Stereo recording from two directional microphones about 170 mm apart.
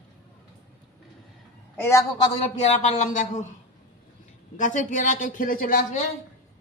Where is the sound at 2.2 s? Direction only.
35° left (ahead or behind).